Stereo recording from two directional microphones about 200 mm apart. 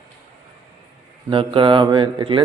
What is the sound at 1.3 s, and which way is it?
A man's voice, 25° right (ahead or behind).